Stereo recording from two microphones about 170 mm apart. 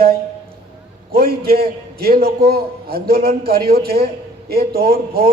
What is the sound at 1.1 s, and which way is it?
A man's voice, 65° right (ahead or behind).